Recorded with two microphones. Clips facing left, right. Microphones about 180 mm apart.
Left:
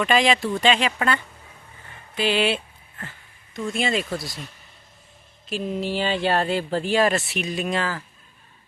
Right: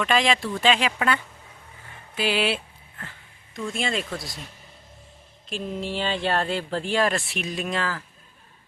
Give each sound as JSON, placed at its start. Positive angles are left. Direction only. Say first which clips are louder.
{"t": 0.0, "sound": "speech", "louder": "left 2 dB", "side_deg": 0}
{"t": 0.3, "sound": "speech", "louder": "left 4 dB", "side_deg": 20}
{"t": 0.6, "sound": "speech", "louder": "right 1 dB", "side_deg": -5}
{"t": 3.7, "sound": "speech", "louder": "left 4 dB", "side_deg": 0}
{"t": 5.5, "sound": "speech", "louder": "left 4 dB", "side_deg": 5}